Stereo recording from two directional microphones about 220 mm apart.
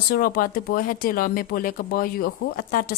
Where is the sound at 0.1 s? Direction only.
40° left (ahead or behind).